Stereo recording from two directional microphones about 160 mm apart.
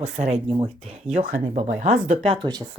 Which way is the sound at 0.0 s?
45° right (ahead or behind).